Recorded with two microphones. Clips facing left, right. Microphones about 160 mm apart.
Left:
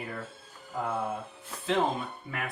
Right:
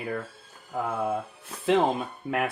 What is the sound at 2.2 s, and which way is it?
Speech, 75° right (ahead or behind).